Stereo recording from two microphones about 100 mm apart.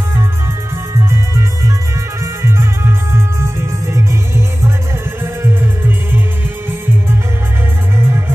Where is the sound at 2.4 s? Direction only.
25° right (ahead or behind).